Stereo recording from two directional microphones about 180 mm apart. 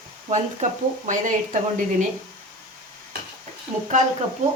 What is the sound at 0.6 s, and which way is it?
Speech, 45° right (ahead or behind).